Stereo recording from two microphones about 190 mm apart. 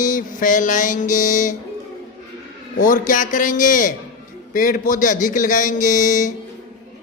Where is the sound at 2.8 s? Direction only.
45° left (ahead or behind).